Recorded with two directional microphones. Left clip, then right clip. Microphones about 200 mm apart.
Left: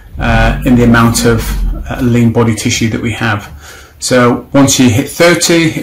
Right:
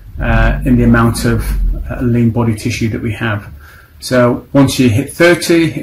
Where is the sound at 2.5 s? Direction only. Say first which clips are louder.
Left 5 dB; 5° left (ahead or behind).